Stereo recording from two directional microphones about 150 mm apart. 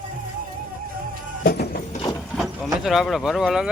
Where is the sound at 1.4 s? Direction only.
85° left.